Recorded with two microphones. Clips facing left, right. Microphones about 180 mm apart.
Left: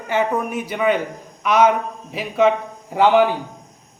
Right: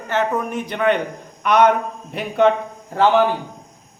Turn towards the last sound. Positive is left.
turn(degrees=10)  # may be behind; listen again after turning